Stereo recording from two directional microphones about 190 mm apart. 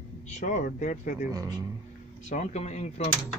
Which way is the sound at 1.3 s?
20° right (ahead or behind).